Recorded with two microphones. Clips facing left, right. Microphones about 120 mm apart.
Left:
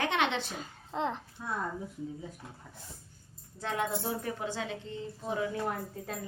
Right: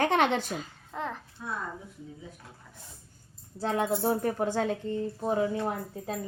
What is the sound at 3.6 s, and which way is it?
Speech, 35° right (ahead or behind).